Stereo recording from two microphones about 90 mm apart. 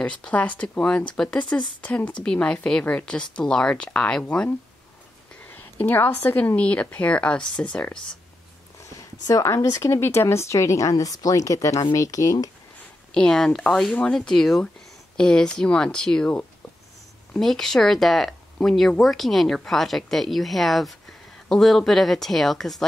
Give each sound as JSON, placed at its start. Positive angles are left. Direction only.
{"t": 0.0, "sound": "a woman's voice", "side_deg": 15}
{"t": 8.8, "sound": "speech", "side_deg": 40}
{"t": 13.1, "sound": "a woman's voice", "side_deg": 5}